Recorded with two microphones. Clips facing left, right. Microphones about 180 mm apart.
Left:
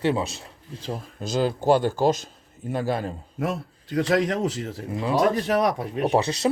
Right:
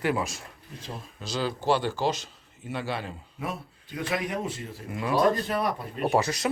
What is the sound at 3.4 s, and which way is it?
A man's voice, 80° left.